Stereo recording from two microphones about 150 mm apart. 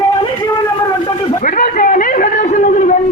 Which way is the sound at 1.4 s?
60° left (ahead or behind).